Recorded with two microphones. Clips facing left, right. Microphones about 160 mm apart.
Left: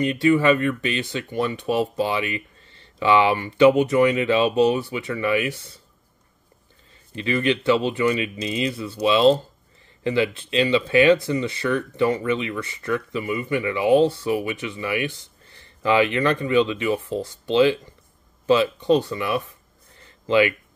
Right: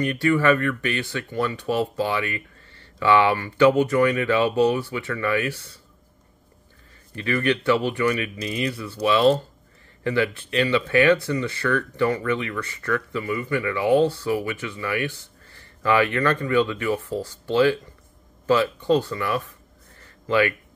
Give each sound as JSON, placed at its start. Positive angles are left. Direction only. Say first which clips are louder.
{"t": 0.0, "sound": "speech", "louder": "left 2 dB", "side_deg": 20}
{"t": 7.2, "sound": "speech", "louder": "left 1 dB", "side_deg": 20}